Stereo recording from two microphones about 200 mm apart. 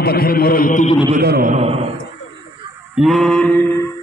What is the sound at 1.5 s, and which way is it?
Speech, 30° right (ahead or behind).